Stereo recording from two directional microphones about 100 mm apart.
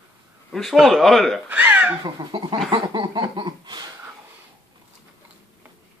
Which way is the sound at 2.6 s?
50° right (ahead or behind).